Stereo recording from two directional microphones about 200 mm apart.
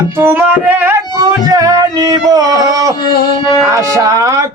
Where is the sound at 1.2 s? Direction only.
15° right (ahead or behind).